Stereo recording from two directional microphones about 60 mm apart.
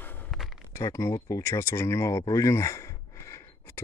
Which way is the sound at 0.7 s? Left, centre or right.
Left.